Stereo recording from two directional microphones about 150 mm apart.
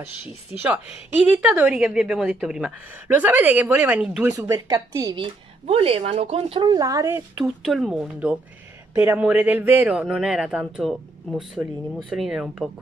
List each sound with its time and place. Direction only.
0.0 s speech: 10° right (ahead or behind)
4.4 s speech: 25° right (ahead or behind)
5.1 s speech: 40° right (ahead or behind)
6.8 s speech: 20° right (ahead or behind)
7.6 s speech: centre (ahead or behind)